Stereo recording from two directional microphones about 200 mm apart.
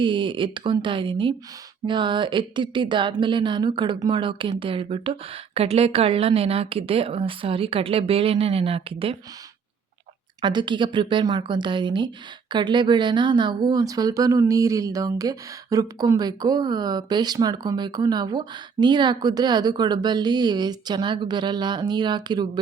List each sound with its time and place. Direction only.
0.0 s a woman's voice: 25° right (ahead or behind)
10.4 s a woman's voice: 25° right (ahead or behind)